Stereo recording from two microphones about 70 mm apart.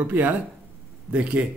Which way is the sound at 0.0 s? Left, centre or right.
Right.